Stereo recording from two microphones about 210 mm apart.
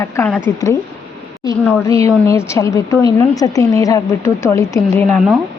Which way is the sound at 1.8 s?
15° left (ahead or behind).